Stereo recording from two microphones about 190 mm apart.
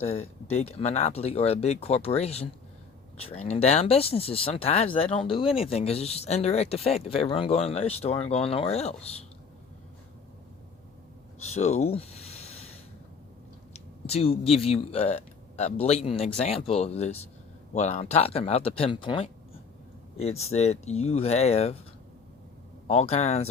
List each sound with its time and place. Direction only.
0.0 s speech: 35° left (ahead or behind)
11.4 s a sound: 35° left (ahead or behind)
13.7 s speech: 30° left (ahead or behind)
22.9 s speech: 35° left (ahead or behind)